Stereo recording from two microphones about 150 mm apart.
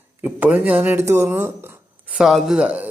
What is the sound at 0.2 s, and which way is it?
Speech, 10° right (ahead or behind).